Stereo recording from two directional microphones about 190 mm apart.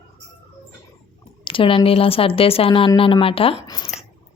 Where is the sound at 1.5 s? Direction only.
30° left (ahead or behind).